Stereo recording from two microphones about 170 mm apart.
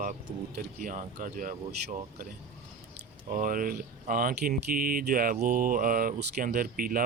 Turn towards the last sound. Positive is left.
turn(degrees=-55)  # may be behind; listen again after turning